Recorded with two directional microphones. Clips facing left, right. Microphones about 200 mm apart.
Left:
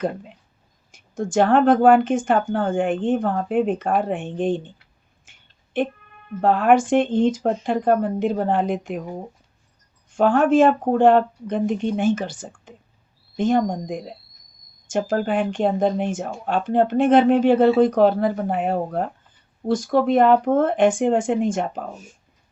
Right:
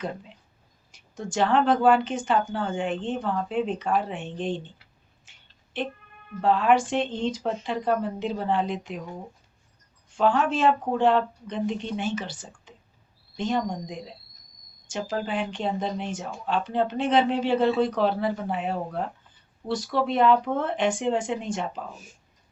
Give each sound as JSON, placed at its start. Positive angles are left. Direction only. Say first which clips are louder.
{"t": 0.0, "sound": "speech", "louder": "left 8 dB", "side_deg": 50}
{"t": 5.3, "sound": "a sound", "louder": "left 5 dB", "side_deg": 50}
{"t": 5.7, "sound": "speech", "louder": "left 8 dB", "side_deg": 50}